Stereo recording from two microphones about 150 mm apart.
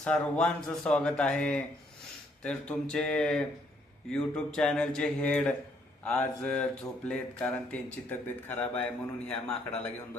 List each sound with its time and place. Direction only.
0.0 s speech: 5° left (ahead or behind)